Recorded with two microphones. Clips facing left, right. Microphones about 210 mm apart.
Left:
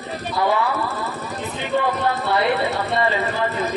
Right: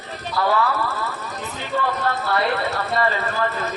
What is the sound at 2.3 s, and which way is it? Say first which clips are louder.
Speech: left 3 dB; 20° left (ahead or behind).